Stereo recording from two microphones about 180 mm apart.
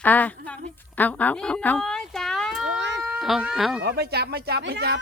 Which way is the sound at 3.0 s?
5° right (ahead or behind).